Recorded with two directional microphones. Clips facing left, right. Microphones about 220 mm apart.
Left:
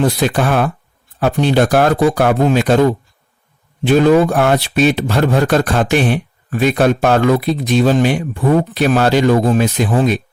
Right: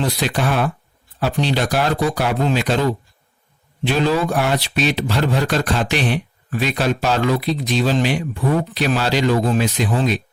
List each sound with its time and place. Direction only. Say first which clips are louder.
0.0 s speech: left 6 dB; 50° left (ahead or behind)
3.9 s speech: left 8 dB; 50° left (ahead or behind)